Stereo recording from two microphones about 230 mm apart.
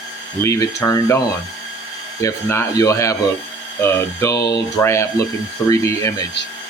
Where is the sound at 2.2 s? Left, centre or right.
Centre.